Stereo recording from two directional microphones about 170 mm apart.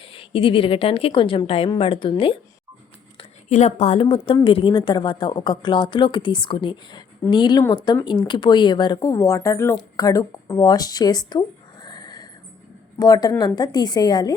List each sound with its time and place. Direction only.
0.0 s a woman's voice: 30° left (ahead or behind)
3.5 s a woman's voice: 40° left (ahead or behind); by 14.3 s 25° left (ahead or behind)